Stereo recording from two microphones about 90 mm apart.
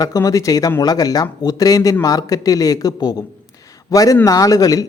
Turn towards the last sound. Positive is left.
turn(degrees=40)  # may be behind; listen again after turning